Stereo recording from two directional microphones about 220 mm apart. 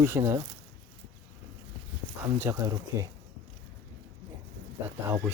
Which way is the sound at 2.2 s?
10° right (ahead or behind).